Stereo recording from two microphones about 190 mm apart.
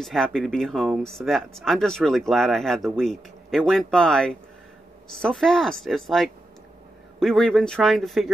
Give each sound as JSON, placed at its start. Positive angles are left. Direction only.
{"t": 0.0, "sound": "speech", "side_deg": 5}